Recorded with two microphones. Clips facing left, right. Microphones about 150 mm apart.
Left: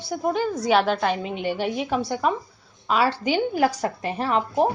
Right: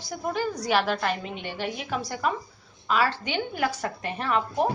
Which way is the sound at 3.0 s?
35° left (ahead or behind).